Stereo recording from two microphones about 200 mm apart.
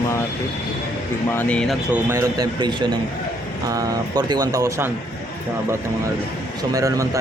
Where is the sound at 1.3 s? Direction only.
5° left (ahead or behind).